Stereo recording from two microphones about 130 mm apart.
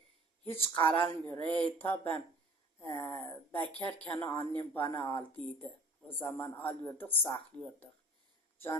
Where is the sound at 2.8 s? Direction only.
45° left (ahead or behind).